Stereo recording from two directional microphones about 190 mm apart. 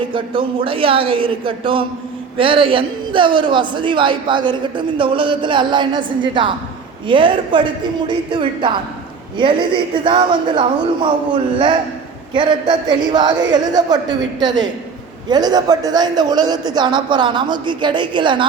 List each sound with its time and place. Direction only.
0.1 s a man's voice: 25° right (ahead or behind)